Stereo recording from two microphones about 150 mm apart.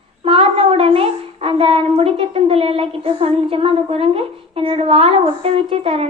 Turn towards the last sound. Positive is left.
turn(degrees=-40)  # may be behind; listen again after turning